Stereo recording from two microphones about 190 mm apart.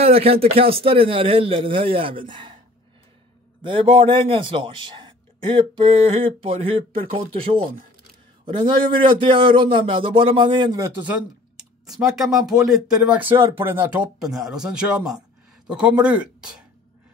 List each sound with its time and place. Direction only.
0.0 s a man's voice: 30° right (ahead or behind)
3.6 s a man's voice: 25° right (ahead or behind)
11.8 s speech: centre (ahead or behind)